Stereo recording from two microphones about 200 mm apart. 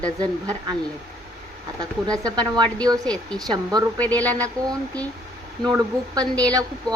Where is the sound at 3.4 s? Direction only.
20° right (ahead or behind).